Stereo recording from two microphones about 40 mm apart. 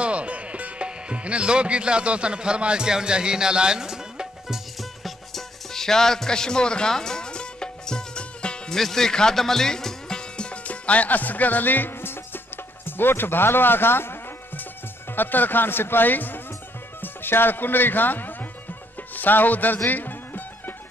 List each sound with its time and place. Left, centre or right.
0.0 s speech: right; by 4.6 s centre
5.0 s music: centre; by 8.7 s left
8.7 s speech: centre; by 14.1 s left
15.1 s speech: left
17.0 s speech: left
19.1 s music: left